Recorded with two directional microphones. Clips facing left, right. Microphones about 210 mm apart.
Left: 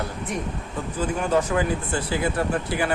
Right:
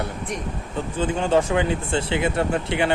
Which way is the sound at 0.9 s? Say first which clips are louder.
Right 2 dB; 25° right (ahead or behind).